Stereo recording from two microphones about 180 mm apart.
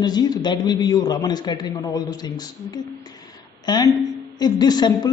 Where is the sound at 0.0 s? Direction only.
20° left (ahead or behind).